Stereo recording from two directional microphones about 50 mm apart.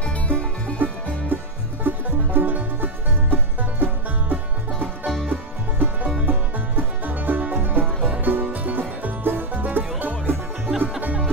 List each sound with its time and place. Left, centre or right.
0.0 s music: left
1.3 s music: right
5.0 s music: centre
5.3 s music: right